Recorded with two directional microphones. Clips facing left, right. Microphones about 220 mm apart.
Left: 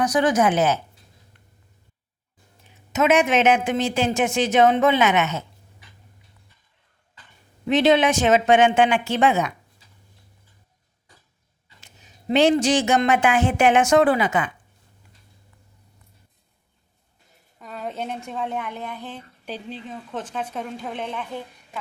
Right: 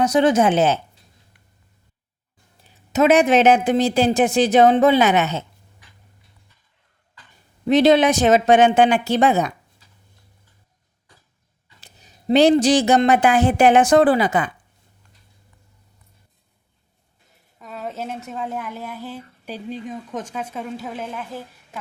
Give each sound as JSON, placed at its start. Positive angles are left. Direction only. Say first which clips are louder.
{"t": 0.0, "sound": "speech", "louder": "right 3 dB", "side_deg": -25}
{"t": 2.6, "sound": "speech", "louder": "right 4 dB", "side_deg": -35}
{"t": 7.7, "sound": "speech", "louder": "right 3 dB", "side_deg": -35}
{"t": 11.8, "sound": "speech", "louder": "right 1 dB", "side_deg": -35}
{"t": 17.6, "sound": "speech", "louder": "even", "side_deg": 0}